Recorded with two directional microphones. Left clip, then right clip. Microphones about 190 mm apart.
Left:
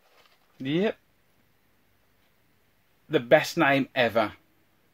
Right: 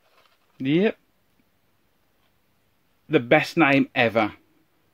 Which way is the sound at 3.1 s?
35° right (ahead or behind).